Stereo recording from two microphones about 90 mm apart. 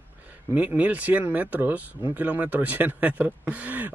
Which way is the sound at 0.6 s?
15° right (ahead or behind).